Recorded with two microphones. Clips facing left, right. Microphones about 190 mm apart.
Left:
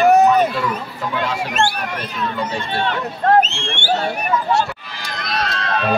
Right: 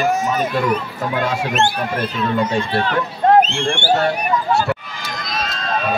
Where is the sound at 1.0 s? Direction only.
50° right (ahead or behind).